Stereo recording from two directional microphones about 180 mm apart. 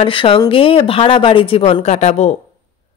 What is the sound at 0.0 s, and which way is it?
A woman's voice, 30° left (ahead or behind).